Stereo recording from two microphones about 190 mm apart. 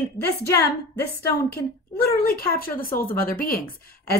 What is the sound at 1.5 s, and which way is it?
A woman's voice, 55° left (ahead or behind).